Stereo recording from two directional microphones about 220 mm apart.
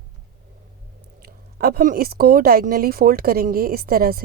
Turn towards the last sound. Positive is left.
turn(degrees=-40)  # may be behind; listen again after turning